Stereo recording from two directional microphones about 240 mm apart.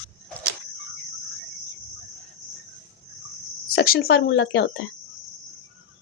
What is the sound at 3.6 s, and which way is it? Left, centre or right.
Speech, left.